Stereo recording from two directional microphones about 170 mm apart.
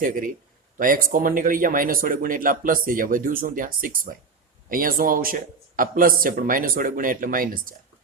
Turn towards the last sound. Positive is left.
turn(degrees=-55)  # may be behind; listen again after turning